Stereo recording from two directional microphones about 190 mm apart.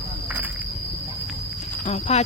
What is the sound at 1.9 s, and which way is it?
Speech, 35° left (ahead or behind).